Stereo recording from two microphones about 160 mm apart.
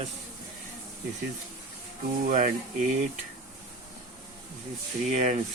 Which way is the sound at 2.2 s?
55° right (ahead or behind).